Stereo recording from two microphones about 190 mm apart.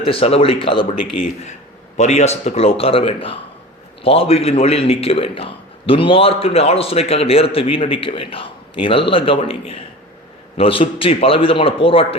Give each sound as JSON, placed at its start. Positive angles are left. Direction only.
{"t": 0.0, "sound": "a man's voice", "side_deg": 30}